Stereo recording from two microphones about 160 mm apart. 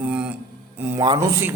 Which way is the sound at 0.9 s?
25° right (ahead or behind).